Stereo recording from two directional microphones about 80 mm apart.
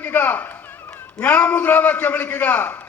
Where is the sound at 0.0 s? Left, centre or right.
Centre.